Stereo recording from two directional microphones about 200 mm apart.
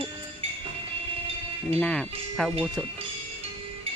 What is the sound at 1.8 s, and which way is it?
Speech, 5° left (ahead or behind).